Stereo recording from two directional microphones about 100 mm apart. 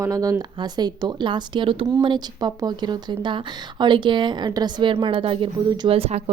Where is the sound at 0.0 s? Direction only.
35° right (ahead or behind); by 5.5 s 60° right (ahead or behind).